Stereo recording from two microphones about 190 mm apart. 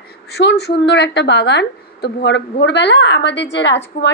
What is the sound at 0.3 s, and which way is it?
A woman's voice, 60° left (ahead or behind).